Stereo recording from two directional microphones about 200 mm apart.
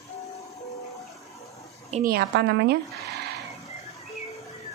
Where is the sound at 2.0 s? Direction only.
55° right (ahead or behind).